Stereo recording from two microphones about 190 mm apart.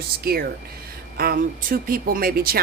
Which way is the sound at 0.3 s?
55° right (ahead or behind).